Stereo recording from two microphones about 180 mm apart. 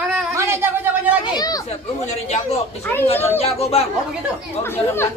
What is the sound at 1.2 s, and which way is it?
Speech, 20° left (ahead or behind).